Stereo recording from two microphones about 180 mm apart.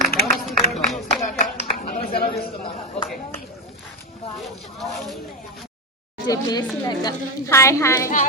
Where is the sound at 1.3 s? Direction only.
50° left (ahead or behind).